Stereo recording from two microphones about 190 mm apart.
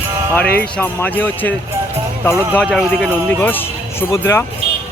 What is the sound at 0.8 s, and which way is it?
Speech, 10° left (ahead or behind).